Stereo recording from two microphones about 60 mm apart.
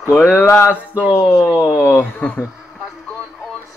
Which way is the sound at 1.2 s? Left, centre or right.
Left.